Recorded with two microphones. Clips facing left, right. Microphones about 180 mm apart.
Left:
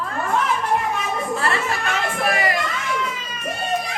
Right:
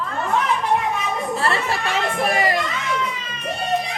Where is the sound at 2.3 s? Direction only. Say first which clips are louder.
Right 2 dB; 30° right (ahead or behind).